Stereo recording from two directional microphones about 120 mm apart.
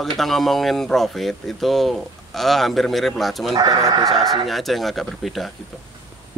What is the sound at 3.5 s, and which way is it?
Speech, 30° right (ahead or behind).